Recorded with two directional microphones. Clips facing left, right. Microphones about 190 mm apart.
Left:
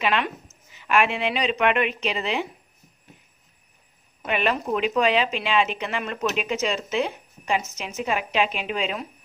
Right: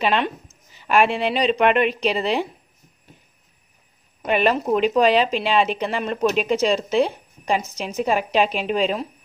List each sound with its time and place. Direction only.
0.0 s speech: 30° right (ahead or behind)
4.3 s speech: 35° right (ahead or behind)